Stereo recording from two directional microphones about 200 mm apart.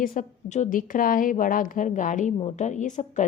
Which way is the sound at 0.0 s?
45° left (ahead or behind).